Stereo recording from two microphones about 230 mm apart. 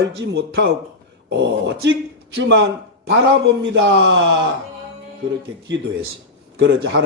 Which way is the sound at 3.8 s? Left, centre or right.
Right.